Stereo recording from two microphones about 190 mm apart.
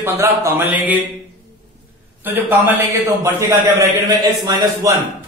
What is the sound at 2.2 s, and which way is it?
A man's voice, 10° right (ahead or behind).